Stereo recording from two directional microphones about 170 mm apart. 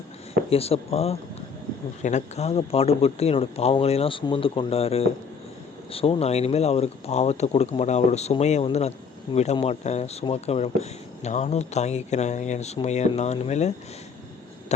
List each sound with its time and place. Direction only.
0.5 s speech: 35° left (ahead or behind)